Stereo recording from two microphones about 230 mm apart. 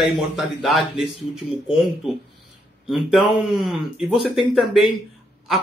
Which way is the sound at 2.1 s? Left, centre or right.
Centre.